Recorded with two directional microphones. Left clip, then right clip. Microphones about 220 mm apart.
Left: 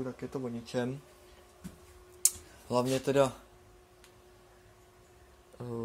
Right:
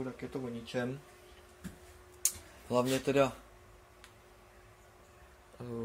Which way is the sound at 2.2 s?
15° left (ahead or behind).